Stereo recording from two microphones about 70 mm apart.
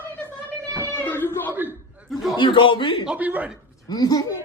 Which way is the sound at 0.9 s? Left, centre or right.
Left.